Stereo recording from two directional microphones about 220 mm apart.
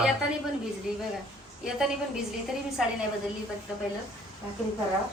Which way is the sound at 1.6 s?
5° right (ahead or behind).